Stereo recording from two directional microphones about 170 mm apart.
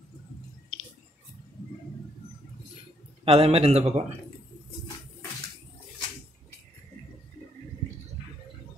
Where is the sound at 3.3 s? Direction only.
35° right (ahead or behind).